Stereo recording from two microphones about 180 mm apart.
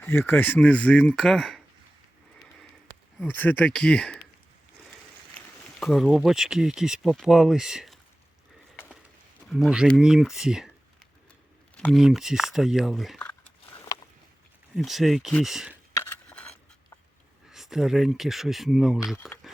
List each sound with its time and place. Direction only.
0.0 s speech: 10° left (ahead or behind)
3.2 s speech: 10° left (ahead or behind)
5.8 s speech: centre (ahead or behind)
9.5 s speech: 5° right (ahead or behind)
14.8 s speech: centre (ahead or behind)
16.0 s scissors: 10° left (ahead or behind)
17.5 s speech: centre (ahead or behind)
19.2 s a sound: centre (ahead or behind)